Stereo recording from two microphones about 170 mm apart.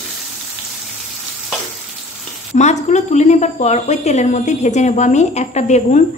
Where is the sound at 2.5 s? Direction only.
45° left (ahead or behind).